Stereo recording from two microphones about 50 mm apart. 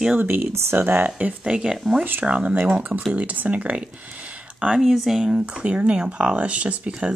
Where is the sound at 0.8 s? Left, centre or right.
Right.